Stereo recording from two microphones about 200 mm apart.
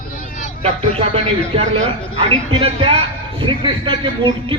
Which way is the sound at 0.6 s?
30° right (ahead or behind).